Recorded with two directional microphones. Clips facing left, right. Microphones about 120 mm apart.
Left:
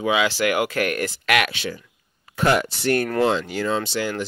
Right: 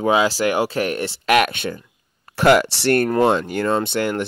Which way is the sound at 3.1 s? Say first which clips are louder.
Right 3 dB; 50° right (ahead or behind).